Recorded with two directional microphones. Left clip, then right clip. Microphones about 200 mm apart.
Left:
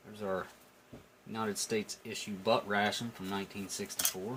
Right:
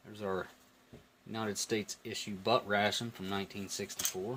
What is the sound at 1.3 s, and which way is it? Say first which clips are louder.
Speech: left 1 dB; 55° right (ahead or behind).